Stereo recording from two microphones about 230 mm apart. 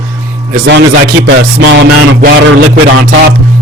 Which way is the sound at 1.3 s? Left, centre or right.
Right.